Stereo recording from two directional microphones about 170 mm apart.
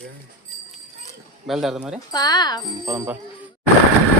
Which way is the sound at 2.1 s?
25° left (ahead or behind).